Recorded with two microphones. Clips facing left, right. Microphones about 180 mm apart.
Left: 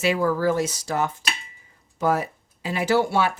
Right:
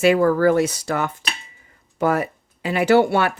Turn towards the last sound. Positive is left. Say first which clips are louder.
# right 5 dB
turn(degrees=-60)  # may be behind; listen again after turning